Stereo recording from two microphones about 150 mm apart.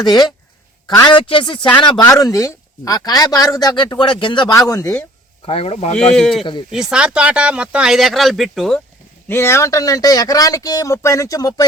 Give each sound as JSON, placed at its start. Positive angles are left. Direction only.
{"t": 0.0, "sound": "speech", "side_deg": 25}
{"t": 5.5, "sound": "speech", "side_deg": 40}
{"t": 6.1, "sound": "speech", "side_deg": 0}
{"t": 9.3, "sound": "speech", "side_deg": 15}